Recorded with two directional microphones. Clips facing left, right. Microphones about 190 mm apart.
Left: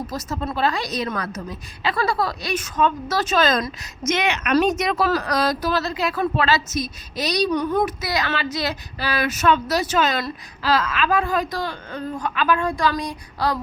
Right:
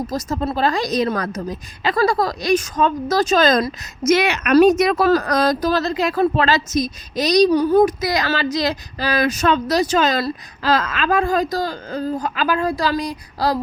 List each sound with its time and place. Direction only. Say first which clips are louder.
0.1 s a woman's voice: right 5 dB; 35° right (ahead or behind)
4.9 s a woman's voice: right 5 dB; 45° right (ahead or behind)